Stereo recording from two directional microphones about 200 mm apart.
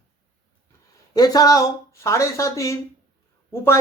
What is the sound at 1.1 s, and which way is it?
Speech, 20° left (ahead or behind).